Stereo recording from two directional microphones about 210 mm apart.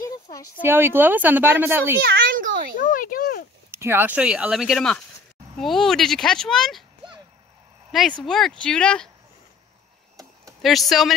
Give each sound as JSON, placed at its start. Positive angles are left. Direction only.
{"t": 0.0, "sound": "a sound", "side_deg": 15}
{"t": 0.6, "sound": "speech", "side_deg": -10}
{"t": 2.0, "sound": "a child's voice", "side_deg": -50}
{"t": 2.8, "sound": "speech", "side_deg": 40}
{"t": 3.7, "sound": "speech", "side_deg": -10}
{"t": 8.2, "sound": "speech", "side_deg": 0}
{"t": 10.6, "sound": "speech", "side_deg": 0}